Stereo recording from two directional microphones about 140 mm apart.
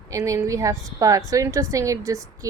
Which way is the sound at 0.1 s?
20° right (ahead or behind).